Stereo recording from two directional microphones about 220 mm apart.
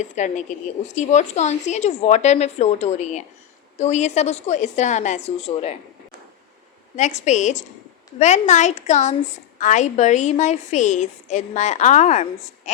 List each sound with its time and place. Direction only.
0.0 s a woman's voice: 35° left (ahead or behind)
6.9 s a woman's voice: 30° left (ahead or behind)